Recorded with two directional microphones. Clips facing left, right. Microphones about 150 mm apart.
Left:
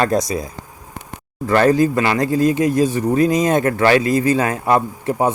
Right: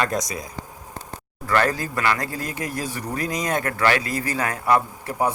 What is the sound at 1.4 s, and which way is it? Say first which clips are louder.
Speech: left 8 dB; 20° left (ahead or behind).